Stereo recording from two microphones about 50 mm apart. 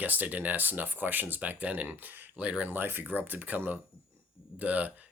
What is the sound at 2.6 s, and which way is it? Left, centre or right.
Speech, right.